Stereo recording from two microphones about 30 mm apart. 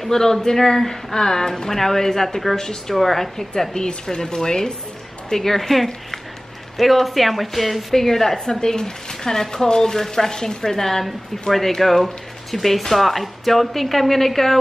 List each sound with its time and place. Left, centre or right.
0.1 s speech: centre
2.9 s speech: centre
5.3 s speech: centre
8.5 s speech: left